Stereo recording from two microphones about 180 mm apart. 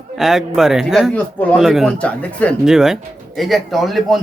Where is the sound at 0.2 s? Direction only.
Centre (ahead or behind).